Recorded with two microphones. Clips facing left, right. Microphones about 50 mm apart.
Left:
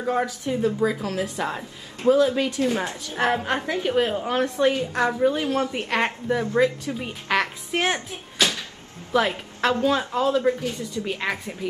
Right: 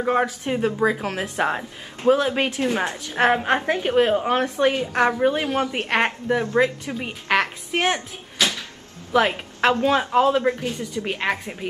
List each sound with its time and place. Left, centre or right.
0.0 s a woman's voice: right